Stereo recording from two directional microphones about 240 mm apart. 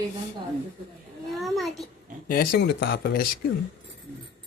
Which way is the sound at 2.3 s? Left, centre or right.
Left.